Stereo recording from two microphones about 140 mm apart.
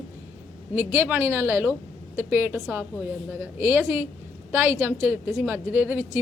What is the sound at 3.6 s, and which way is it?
A woman's voice, 15° right (ahead or behind).